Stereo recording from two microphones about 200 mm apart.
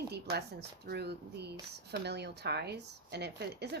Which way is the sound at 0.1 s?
55° right (ahead or behind).